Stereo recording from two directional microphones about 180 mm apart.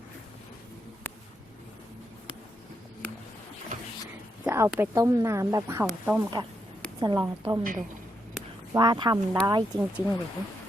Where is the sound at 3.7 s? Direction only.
45° right (ahead or behind).